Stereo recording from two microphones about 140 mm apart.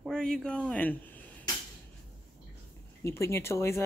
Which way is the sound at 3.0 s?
20° left (ahead or behind).